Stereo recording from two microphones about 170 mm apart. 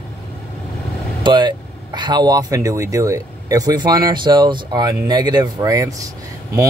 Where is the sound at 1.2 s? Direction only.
25° right (ahead or behind).